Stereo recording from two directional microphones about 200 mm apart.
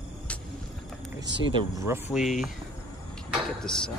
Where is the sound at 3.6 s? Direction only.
5° left (ahead or behind).